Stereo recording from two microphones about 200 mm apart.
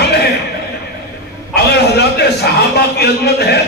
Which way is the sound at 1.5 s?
55° left (ahead or behind).